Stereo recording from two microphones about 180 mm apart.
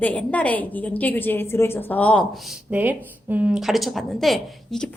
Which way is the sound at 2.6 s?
10° right (ahead or behind).